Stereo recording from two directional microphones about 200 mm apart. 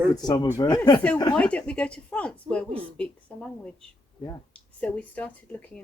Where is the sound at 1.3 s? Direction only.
5° left (ahead or behind).